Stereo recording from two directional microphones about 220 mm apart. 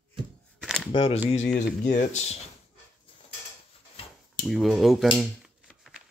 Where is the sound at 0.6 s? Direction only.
Centre (ahead or behind).